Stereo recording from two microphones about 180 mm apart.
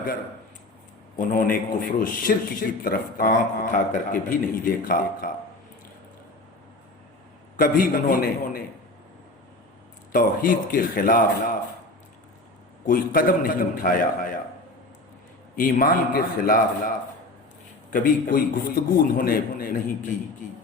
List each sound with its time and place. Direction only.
1.1 s a man's voice: 50° left (ahead or behind)
7.5 s speech: 50° left (ahead or behind)
10.1 s speech: 55° left (ahead or behind)
12.8 s speech: 50° left (ahead or behind)
15.5 s speech: 50° left (ahead or behind)
17.9 s speech: 50° left (ahead or behind)